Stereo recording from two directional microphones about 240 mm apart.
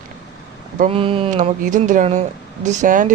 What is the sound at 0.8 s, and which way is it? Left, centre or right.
Speech, right.